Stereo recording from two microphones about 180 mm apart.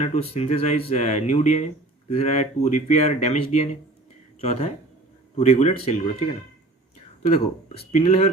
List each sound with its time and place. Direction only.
0.0 s speech: 35° left (ahead or behind)